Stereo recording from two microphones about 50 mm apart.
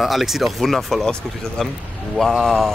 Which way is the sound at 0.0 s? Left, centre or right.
Centre.